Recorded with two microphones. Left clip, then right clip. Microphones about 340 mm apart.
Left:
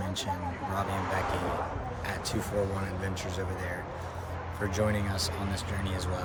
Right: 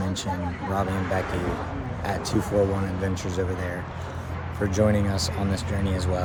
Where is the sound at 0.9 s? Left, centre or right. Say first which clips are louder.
Right 3 dB; left.